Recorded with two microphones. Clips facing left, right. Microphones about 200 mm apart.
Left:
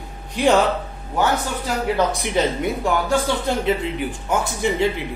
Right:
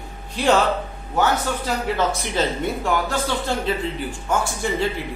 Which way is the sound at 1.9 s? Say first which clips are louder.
Left 4 dB; 15° left (ahead or behind).